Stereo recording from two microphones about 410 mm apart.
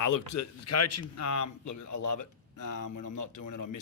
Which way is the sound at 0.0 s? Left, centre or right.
Left.